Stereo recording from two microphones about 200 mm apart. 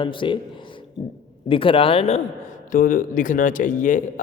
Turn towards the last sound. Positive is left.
turn(degrees=40)  # may be behind; listen again after turning